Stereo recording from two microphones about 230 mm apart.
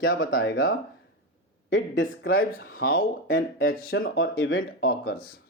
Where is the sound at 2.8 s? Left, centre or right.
Left.